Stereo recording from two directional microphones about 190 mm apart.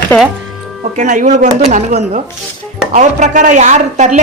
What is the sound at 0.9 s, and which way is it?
Speech, 40° right (ahead or behind).